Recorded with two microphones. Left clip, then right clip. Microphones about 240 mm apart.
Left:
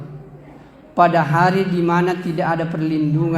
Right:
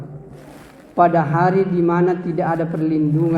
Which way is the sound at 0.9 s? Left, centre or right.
Left.